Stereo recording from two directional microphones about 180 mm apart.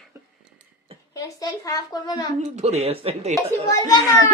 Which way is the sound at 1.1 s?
20° left (ahead or behind).